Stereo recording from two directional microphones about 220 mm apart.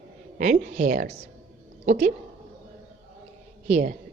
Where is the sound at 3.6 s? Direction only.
30° right (ahead or behind).